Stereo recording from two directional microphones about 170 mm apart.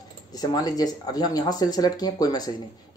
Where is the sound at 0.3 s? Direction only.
20° left (ahead or behind).